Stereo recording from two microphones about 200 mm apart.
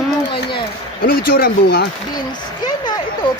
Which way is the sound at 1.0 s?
50° left (ahead or behind).